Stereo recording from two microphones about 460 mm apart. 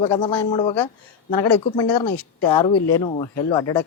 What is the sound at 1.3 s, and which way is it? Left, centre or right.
A man's voice, left.